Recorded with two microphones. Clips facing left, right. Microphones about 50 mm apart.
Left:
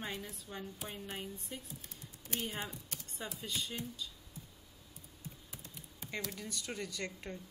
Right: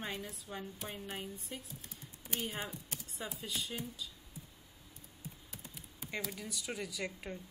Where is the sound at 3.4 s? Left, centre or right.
Centre.